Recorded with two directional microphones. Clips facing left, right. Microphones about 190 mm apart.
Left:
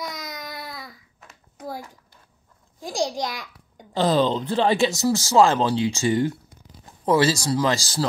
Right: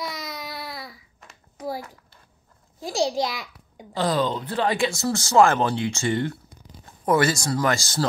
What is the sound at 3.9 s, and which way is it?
Speech, 25° left (ahead or behind).